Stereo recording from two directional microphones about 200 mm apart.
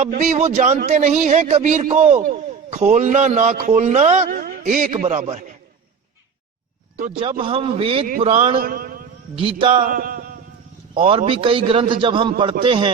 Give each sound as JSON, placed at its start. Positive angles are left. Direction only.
{"t": 0.0, "sound": "a man's voice", "side_deg": -35}
{"t": 7.2, "sound": "a man's voice", "side_deg": -25}
{"t": 8.6, "sound": "a man's voice", "side_deg": -45}
{"t": 9.3, "sound": "a man's voice", "side_deg": -25}
{"t": 9.8, "sound": "a sound", "side_deg": -45}
{"t": 10.9, "sound": "a man's voice", "side_deg": -25}